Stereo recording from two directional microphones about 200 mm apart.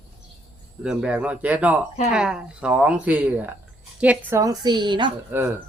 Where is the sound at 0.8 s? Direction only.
5° right (ahead or behind); by 5.1 s 25° right (ahead or behind).